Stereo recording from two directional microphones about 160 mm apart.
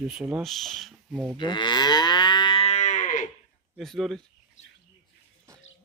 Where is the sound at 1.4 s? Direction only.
30° left (ahead or behind); by 3.3 s 50° left (ahead or behind).